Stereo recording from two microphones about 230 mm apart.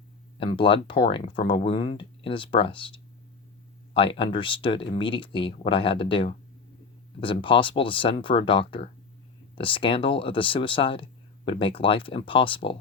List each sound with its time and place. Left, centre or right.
0.3 s speech: left